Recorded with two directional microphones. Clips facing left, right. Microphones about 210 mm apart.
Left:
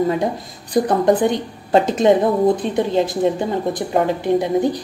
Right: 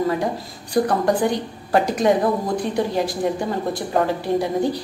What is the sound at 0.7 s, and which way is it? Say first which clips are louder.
A woman's voice: left 3 dB; 20° left (ahead or behind).